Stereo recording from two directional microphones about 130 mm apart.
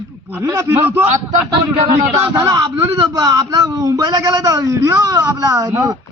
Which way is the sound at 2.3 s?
30° right (ahead or behind).